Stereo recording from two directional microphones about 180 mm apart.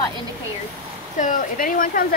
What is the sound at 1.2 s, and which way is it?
Speech, 50° left (ahead or behind).